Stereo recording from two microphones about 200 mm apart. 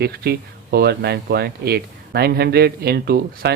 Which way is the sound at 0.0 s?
55° right (ahead or behind).